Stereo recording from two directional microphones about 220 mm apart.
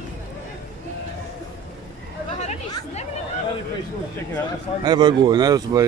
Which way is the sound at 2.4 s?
30° left (ahead or behind).